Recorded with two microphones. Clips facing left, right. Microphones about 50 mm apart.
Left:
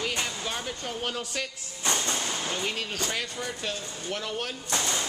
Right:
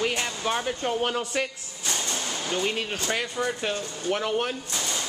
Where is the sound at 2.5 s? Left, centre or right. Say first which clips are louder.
Right 4 dB; centre.